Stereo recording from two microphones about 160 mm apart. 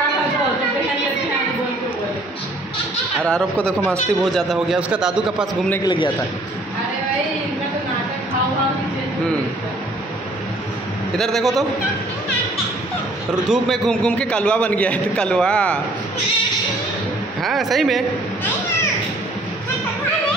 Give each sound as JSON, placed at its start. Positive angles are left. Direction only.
{"t": 3.3, "sound": "a man's voice", "side_deg": 5}
{"t": 5.9, "sound": "a man's voice", "side_deg": 30}
{"t": 11.1, "sound": "a man's voice", "side_deg": 0}
{"t": 13.3, "sound": "a man's voice", "side_deg": 0}
{"t": 17.4, "sound": "a man's voice", "side_deg": 0}